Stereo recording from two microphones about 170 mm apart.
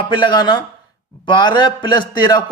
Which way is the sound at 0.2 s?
25° left (ahead or behind).